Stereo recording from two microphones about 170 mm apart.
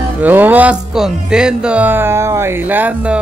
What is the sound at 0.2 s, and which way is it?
Speech, 10° right (ahead or behind).